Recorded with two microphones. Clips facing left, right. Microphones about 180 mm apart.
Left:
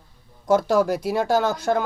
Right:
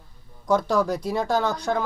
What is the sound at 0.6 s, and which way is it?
Speech, 5° left (ahead or behind).